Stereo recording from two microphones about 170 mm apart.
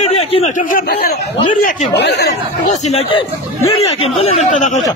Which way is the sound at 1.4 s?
45° left (ahead or behind).